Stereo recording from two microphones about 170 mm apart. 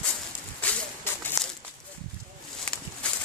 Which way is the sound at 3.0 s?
5° left (ahead or behind).